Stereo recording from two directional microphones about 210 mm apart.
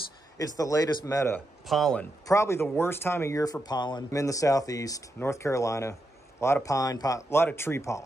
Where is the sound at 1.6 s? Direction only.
Centre (ahead or behind).